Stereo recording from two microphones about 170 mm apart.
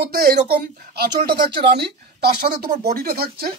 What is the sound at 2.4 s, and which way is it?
Speech, 65° right (ahead or behind).